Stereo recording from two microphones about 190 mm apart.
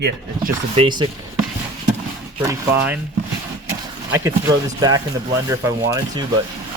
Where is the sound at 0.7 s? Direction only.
25° right (ahead or behind).